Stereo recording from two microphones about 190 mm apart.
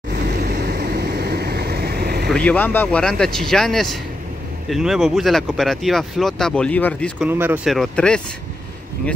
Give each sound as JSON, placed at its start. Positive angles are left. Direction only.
{"t": 0.1, "sound": "vehicle", "side_deg": -60}
{"t": 2.3, "sound": "speech", "side_deg": 5}
{"t": 7.2, "sound": "speech", "side_deg": -10}